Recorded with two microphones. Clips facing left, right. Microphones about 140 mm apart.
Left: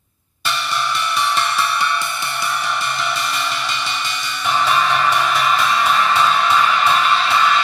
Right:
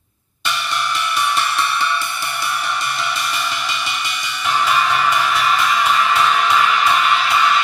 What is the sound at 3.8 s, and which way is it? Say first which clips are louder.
Music: even; 5° right (ahead or behind).